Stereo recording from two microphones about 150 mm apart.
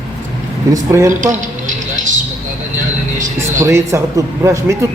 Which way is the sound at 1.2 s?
55° right (ahead or behind).